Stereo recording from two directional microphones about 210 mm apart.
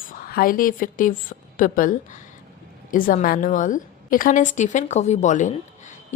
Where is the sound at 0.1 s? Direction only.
45° left (ahead or behind).